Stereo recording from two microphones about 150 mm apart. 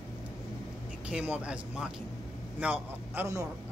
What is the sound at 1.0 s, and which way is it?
Speech, 10° right (ahead or behind).